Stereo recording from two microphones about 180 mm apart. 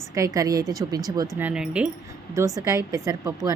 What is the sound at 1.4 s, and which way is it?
Speech, 5° right (ahead or behind).